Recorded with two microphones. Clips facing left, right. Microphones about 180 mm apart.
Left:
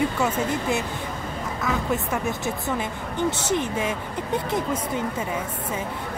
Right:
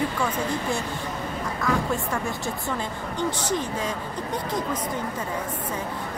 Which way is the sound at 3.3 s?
25° left (ahead or behind).